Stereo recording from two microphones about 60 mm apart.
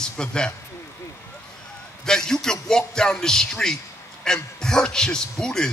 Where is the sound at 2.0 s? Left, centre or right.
Centre.